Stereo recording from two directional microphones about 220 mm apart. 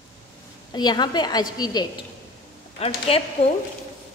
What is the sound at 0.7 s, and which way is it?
A woman's voice, 20° left (ahead or behind).